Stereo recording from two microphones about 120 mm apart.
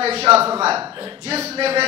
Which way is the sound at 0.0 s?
60° right (ahead or behind).